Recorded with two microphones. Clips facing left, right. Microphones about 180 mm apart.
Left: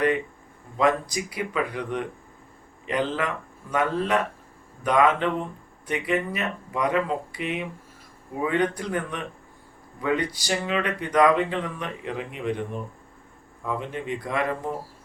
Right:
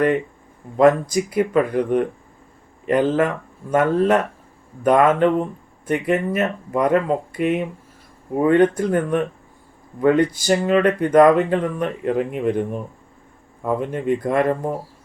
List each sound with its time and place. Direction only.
0.8 s speech: 45° right (ahead or behind)
13.6 s speech: 50° right (ahead or behind)